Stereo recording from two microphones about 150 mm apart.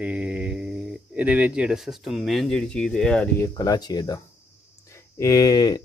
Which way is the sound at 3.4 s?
25° left (ahead or behind).